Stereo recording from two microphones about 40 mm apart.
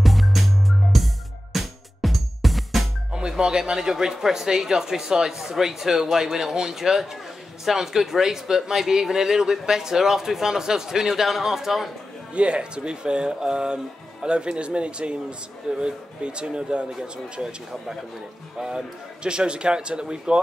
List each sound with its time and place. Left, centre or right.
0.0 s music: centre
3.1 s speech: right
12.4 s speech: right